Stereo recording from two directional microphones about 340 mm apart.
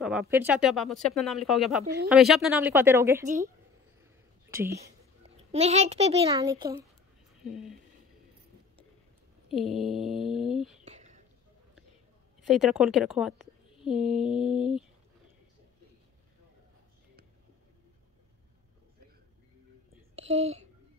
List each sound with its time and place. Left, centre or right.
0.0 s a woman's voice: centre
4.0 s a sound: centre
5.5 s a child's voice: centre
9.5 s a woman's voice: centre
10.8 s whispering: right
12.4 s a woman's voice: centre
20.2 s a child's voice: centre